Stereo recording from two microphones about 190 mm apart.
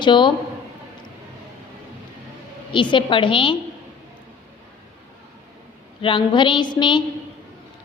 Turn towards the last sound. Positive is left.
turn(degrees=25)  # may be behind; listen again after turning